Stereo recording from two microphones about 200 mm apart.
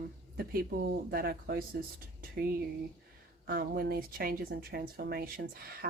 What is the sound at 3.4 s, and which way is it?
Speech, 50° right (ahead or behind).